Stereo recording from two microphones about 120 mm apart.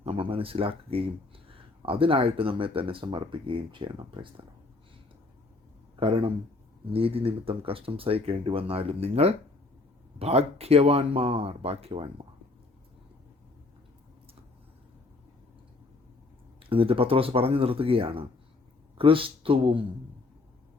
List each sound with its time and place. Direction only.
0.0 s speech: 50° right (ahead or behind)
6.0 s speech: 45° right (ahead or behind)
16.6 s speech: 50° right (ahead or behind)